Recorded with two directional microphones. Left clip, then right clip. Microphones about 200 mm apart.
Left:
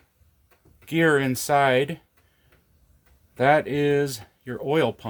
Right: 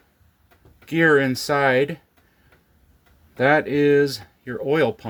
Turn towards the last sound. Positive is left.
turn(degrees=25)  # may be behind; listen again after turning